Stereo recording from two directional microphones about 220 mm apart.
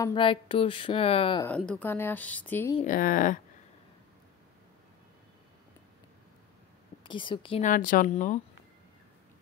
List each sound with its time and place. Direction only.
0.0 s speech: 20° left (ahead or behind)
1.6 s a woman's voice: 5° left (ahead or behind)
2.8 s speech: 40° left (ahead or behind)
7.0 s a woman's voice: 20° left (ahead or behind)
7.7 s speech: 40° left (ahead or behind)